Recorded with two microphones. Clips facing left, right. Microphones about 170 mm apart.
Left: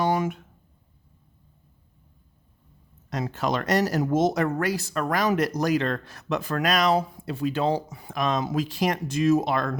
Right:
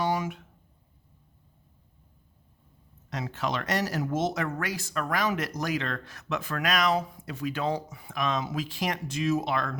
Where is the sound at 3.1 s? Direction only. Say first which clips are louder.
Left 5 dB; 40° left (ahead or behind).